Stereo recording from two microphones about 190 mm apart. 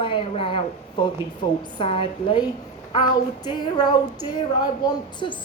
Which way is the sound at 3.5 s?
20° left (ahead or behind).